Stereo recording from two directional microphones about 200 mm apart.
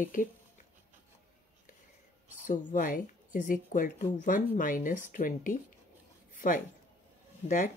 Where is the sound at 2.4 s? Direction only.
40° left (ahead or behind).